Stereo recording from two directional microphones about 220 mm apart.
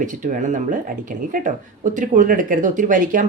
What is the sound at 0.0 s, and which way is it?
Speech, 35° right (ahead or behind).